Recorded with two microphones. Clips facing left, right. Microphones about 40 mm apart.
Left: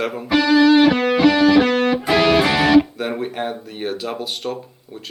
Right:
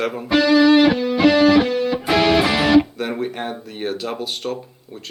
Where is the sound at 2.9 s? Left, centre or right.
Centre.